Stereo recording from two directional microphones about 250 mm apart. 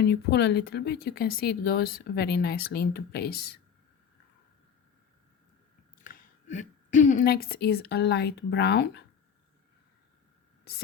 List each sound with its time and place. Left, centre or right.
0.0 s speech: left
6.1 s a woman's voice: left